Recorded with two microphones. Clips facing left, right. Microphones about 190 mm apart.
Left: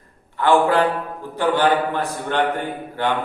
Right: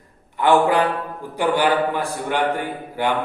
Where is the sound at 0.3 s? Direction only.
15° right (ahead or behind).